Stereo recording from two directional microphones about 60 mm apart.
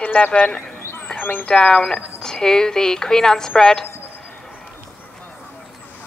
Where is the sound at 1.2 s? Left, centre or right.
Left.